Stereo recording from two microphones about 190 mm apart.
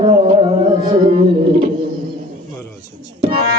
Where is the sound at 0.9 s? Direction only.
25° right (ahead or behind).